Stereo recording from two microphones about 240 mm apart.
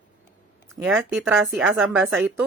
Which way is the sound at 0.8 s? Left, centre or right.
Centre.